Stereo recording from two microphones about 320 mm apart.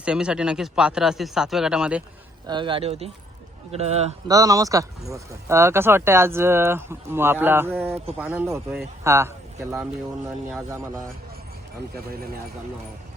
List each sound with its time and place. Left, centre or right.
0.0 s speech: centre
2.5 s speech: centre